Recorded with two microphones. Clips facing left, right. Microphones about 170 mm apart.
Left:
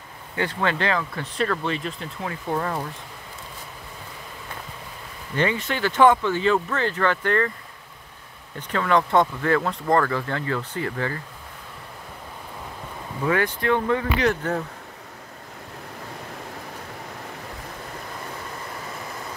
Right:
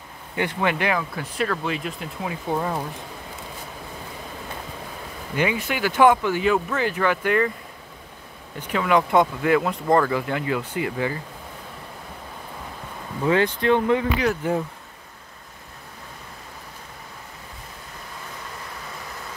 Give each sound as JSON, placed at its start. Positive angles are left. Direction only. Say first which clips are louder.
{"t": 0.4, "sound": "speech", "louder": "right 1 dB", "side_deg": -15}
{"t": 5.3, "sound": "speech", "louder": "even", "side_deg": -10}
{"t": 8.5, "sound": "speech", "louder": "right 1 dB", "side_deg": -10}
{"t": 13.3, "sound": "speech", "louder": "right 3 dB", "side_deg": -20}